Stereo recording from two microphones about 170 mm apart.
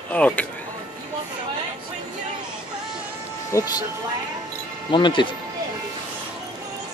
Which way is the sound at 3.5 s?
20° left (ahead or behind).